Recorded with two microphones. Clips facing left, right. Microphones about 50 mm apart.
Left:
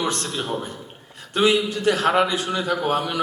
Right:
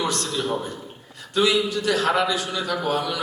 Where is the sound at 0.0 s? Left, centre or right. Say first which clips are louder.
Even; left.